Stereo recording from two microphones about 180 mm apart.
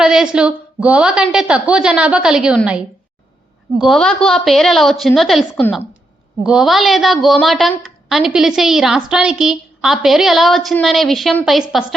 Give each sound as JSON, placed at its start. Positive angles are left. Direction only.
{"t": 0.0, "sound": "a woman's voice", "side_deg": -5}
{"t": 3.8, "sound": "a woman's voice", "side_deg": 0}